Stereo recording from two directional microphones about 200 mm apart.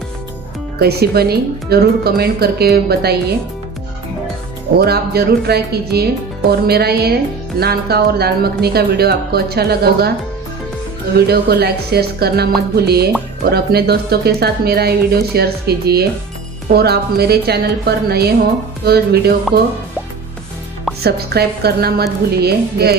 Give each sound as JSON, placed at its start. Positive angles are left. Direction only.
{"t": 0.7, "sound": "speech", "side_deg": -50}
{"t": 4.7, "sound": "speech", "side_deg": -55}
{"t": 11.1, "sound": "speech", "side_deg": -50}
{"t": 21.0, "sound": "speech", "side_deg": -55}